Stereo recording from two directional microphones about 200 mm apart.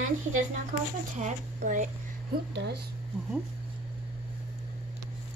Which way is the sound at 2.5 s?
55° right (ahead or behind).